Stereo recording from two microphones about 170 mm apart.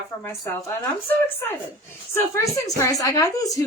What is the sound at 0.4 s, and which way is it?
Speech, 15° left (ahead or behind).